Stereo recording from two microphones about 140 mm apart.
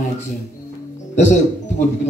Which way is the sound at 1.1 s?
60° left (ahead or behind).